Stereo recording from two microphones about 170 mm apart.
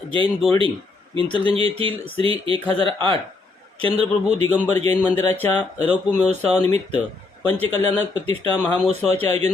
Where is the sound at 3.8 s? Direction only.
35° right (ahead or behind).